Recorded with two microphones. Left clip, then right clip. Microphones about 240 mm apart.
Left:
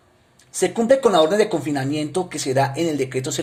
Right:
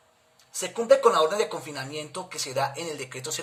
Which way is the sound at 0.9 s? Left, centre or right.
Centre.